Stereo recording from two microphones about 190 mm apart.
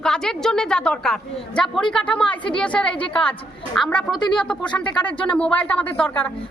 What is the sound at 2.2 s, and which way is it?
Speech, 25° left (ahead or behind).